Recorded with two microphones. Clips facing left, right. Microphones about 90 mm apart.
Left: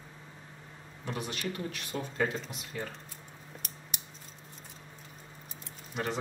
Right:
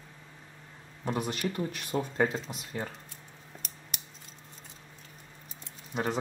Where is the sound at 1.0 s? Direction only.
40° right (ahead or behind).